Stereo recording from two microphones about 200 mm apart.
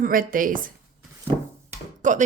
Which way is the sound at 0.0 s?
45° right (ahead or behind).